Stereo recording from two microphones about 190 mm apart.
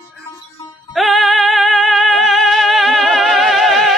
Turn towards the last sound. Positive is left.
turn(degrees=0)  # may be behind; listen again after turning